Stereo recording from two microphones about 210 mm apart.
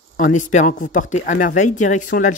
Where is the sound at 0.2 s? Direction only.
35° left (ahead or behind).